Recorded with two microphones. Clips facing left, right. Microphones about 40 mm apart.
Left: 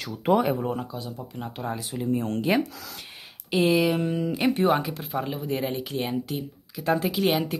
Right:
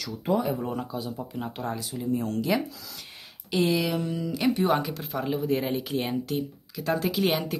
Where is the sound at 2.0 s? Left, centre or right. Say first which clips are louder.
Left 2 dB; left.